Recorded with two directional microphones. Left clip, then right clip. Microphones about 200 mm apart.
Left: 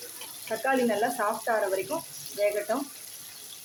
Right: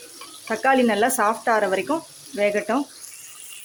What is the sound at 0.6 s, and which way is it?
Speech, 45° right (ahead or behind).